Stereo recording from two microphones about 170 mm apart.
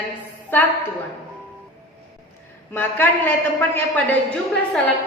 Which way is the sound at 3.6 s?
10° left (ahead or behind).